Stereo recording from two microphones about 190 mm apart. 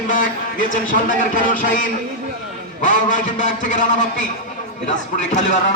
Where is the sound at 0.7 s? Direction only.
45° left (ahead or behind).